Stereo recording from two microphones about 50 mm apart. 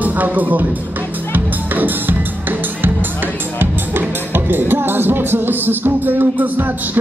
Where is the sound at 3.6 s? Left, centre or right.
Right.